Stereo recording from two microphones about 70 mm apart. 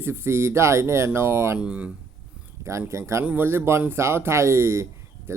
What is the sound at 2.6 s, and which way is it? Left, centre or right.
Speech, right.